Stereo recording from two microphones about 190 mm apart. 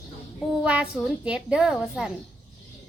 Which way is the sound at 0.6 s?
5° right (ahead or behind).